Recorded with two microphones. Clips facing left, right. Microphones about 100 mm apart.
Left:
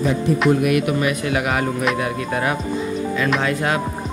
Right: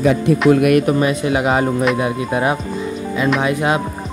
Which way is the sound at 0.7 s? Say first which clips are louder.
Right 5 dB; 40° right (ahead or behind).